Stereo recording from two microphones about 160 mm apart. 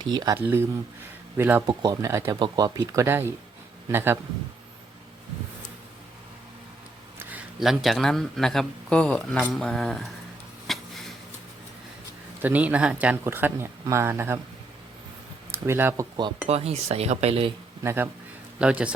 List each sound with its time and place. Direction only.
0.0 s speech: 25° right (ahead or behind)
0.3 s speech: 10° right (ahead or behind)
1.6 s speech: 25° right (ahead or behind)
7.2 s speech: 10° right (ahead or behind)
10.7 s a sound: centre (ahead or behind)
12.4 s speech: 10° right (ahead or behind)
15.5 s speech: 15° right (ahead or behind)
16.5 s speech: 40° right (ahead or behind)
17.8 s speech: 15° right (ahead or behind)